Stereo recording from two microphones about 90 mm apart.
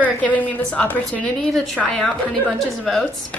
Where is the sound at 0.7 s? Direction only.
15° left (ahead or behind).